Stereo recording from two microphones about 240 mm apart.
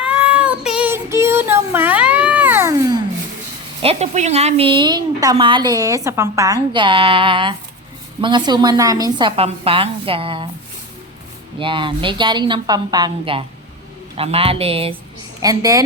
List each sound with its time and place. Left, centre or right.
0.0 s child singing: centre
3.8 s a woman's voice: right
11.6 s a woman's voice: right